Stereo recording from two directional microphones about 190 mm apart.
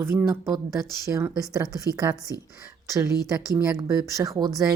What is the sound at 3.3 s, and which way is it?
Speech, 15° right (ahead or behind).